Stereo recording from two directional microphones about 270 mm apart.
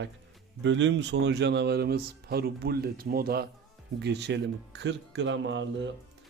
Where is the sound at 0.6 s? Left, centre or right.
Right.